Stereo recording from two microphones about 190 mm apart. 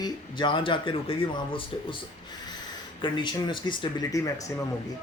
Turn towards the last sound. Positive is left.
turn(degrees=20)  # may be behind; listen again after turning